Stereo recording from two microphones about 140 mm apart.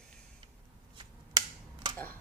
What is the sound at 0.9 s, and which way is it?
Scissors, 35° right (ahead or behind).